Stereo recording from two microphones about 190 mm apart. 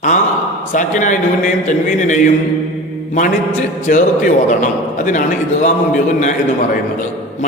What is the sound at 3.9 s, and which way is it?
A man's voice, 40° left (ahead or behind).